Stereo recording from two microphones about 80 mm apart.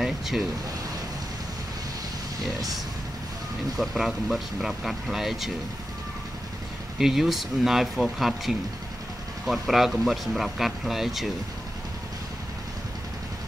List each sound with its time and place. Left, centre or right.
0.0 s vehicle: centre
3.7 s speech: centre
7.0 s speech: centre